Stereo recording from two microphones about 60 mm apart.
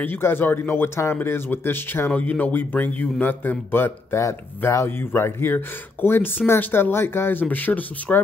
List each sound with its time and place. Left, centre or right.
0.0 s speech: left